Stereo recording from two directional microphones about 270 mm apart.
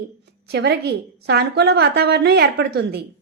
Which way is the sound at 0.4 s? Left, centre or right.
Right.